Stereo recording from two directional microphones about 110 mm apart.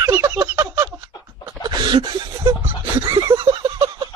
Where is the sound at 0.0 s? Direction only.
35° right (ahead or behind).